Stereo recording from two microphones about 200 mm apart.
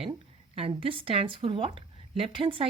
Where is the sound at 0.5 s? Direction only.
30° right (ahead or behind).